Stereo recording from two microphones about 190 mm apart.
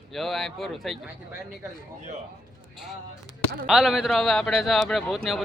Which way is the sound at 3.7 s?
Centre (ahead or behind).